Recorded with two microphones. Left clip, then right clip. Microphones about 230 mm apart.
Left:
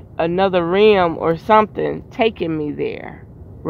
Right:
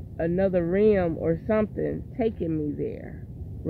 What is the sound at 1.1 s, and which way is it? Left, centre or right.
Speech, left.